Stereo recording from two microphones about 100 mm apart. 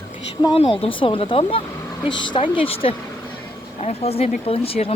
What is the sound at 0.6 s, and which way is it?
Speech, 75° left (ahead or behind).